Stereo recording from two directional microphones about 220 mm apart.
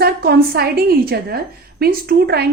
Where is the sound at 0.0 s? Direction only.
45° right (ahead or behind).